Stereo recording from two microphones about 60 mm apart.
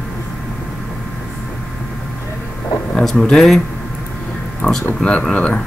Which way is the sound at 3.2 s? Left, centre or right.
Centre.